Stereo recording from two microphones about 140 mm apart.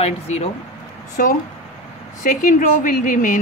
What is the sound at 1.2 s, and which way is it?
Speech, 80° left.